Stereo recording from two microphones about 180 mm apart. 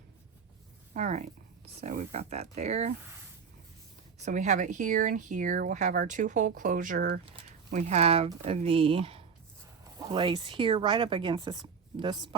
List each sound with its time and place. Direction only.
0.9 s speech: 40° right (ahead or behind)
4.2 s speech: 40° right (ahead or behind); by 12.4 s 25° right (ahead or behind)